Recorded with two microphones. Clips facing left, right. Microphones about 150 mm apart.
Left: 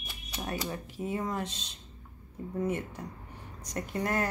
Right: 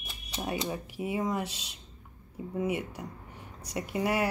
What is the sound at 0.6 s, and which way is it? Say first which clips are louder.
Speech: right 2 dB; 10° right (ahead or behind).